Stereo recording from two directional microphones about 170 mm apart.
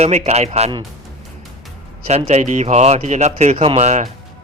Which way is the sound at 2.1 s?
40° right (ahead or behind).